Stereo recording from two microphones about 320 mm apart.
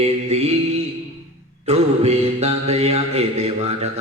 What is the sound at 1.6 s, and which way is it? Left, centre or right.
A man's voice, centre.